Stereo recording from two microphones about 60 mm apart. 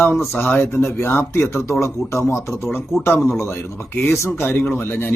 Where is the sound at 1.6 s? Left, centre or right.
Left.